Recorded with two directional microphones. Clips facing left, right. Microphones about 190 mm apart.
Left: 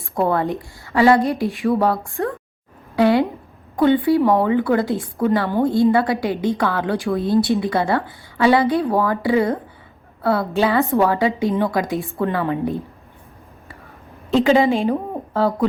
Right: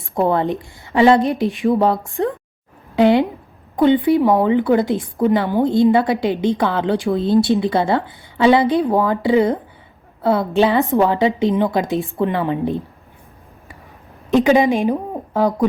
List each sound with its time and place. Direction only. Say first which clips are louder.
0.0 s a woman's voice: right 2 dB; 20° right (ahead or behind)
2.9 s a sound: right 2 dB; 20° right (ahead or behind)
3.8 s a woman's voice: right 2 dB; 20° right (ahead or behind)
14.3 s a woman's voice: right 1 dB; 15° right (ahead or behind)